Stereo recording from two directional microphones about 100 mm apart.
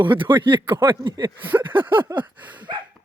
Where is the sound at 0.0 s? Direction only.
55° right (ahead or behind).